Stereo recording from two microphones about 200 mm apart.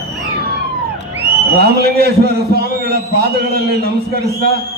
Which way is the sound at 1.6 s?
50° right (ahead or behind).